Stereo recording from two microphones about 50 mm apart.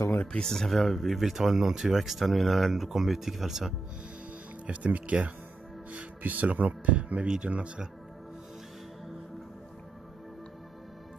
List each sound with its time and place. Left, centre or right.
0.3 s speech: centre
4.6 s speech: right